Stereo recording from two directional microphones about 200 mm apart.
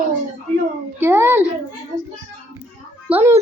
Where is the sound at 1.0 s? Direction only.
10° right (ahead or behind).